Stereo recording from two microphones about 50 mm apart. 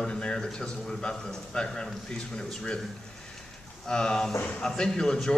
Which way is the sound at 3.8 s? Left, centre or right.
Centre.